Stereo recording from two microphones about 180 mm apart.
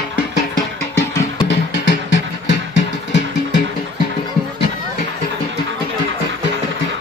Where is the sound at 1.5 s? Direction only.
80° left.